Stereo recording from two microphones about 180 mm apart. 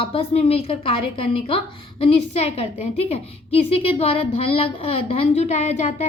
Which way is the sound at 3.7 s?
35° left (ahead or behind).